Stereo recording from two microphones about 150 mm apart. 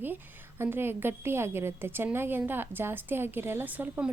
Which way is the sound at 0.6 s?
15° right (ahead or behind).